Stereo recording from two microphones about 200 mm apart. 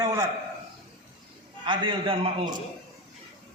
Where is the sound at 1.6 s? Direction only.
25° right (ahead or behind).